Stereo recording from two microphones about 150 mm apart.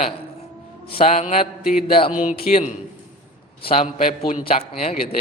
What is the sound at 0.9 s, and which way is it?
Mantra, 45° left (ahead or behind).